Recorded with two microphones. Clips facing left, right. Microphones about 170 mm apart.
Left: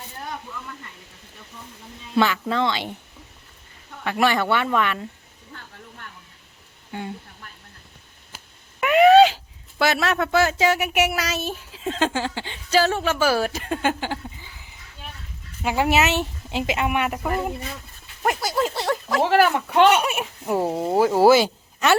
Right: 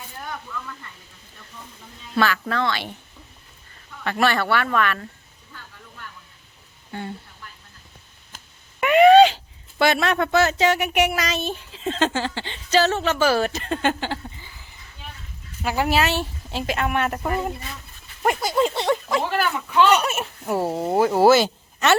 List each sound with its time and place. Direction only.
2.1 s speech: 20° left (ahead or behind)
4.0 s speech: 15° left (ahead or behind)
6.9 s speech: 15° left (ahead or behind)
8.8 s speech: centre (ahead or behind)
15.6 s speech: 20° left (ahead or behind); by 18.8 s centre (ahead or behind)
18.9 s a sound: centre (ahead or behind)
19.3 s speech: 70° left (ahead or behind)
20.0 s speech: 10° left (ahead or behind)
20.6 s speech: centre (ahead or behind)